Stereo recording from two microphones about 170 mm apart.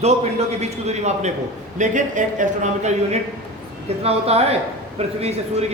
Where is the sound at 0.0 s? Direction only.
40° right (ahead or behind).